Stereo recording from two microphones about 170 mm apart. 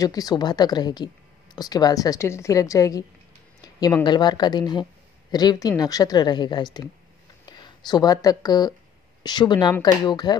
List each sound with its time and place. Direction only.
0.0 s speech: 20° left (ahead or behind)